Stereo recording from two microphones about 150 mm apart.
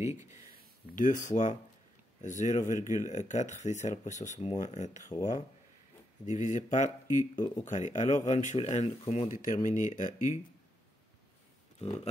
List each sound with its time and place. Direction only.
0.0 s speech: 20° right (ahead or behind)
0.9 s speech: 55° left (ahead or behind)
6.2 s speech: 55° left (ahead or behind)
7.3 s speech: 30° left (ahead or behind)
7.6 s speech: 55° left (ahead or behind)
8.5 s speech: 45° left (ahead or behind)
9.3 s speech: 65° left (ahead or behind)